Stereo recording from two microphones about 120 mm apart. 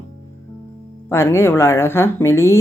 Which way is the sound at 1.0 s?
20° left (ahead or behind).